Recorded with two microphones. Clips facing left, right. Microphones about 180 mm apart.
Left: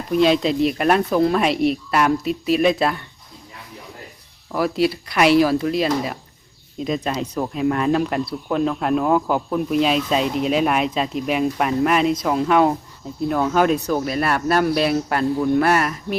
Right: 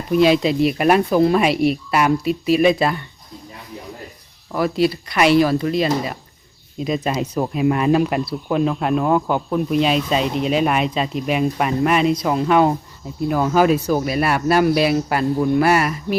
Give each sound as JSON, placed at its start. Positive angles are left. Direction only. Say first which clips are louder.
{"t": 0.1, "sound": "speech", "louder": "right 2 dB", "side_deg": -5}
{"t": 4.5, "sound": "speech", "louder": "right 1 dB", "side_deg": 0}